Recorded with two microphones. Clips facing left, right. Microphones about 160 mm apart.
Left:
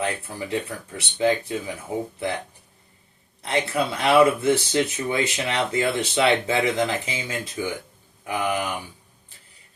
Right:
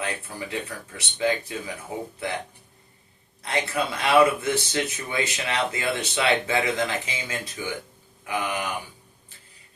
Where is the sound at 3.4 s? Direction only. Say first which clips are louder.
Left 3 dB; 30° left (ahead or behind).